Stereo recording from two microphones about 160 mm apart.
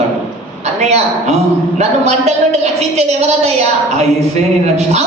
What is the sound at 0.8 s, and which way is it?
A man's voice, 45° right (ahead or behind).